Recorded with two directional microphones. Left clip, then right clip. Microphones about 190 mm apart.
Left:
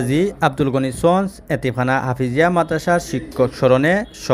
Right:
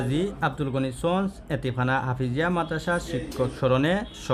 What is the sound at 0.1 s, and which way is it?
Speech, 20° left (ahead or behind).